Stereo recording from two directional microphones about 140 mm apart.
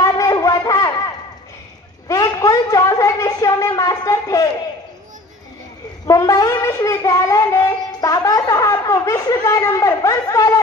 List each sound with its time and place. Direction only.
0.0 s shofar: 25° left (ahead or behind)
2.0 s a sound: 25° left (ahead or behind)
6.0 s child singing: 25° left (ahead or behind)